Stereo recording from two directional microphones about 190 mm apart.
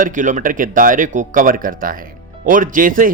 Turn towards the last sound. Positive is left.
turn(degrees=-45)  # may be behind; listen again after turning